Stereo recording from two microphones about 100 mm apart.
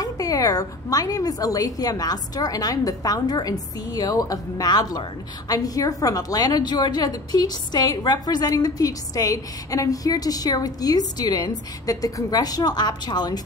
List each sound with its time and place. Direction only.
0.0 s a woman's voice: 35° left (ahead or behind)